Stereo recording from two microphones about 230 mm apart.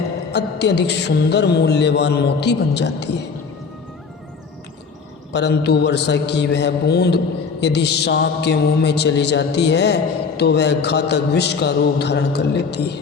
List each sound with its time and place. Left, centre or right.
0.3 s mantra: left
5.3 s mantra: left